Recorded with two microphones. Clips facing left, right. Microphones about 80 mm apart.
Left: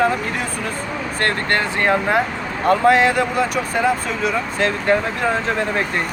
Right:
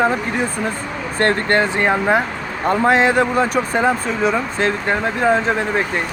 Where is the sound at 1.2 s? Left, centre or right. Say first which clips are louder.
Right 4 dB; right.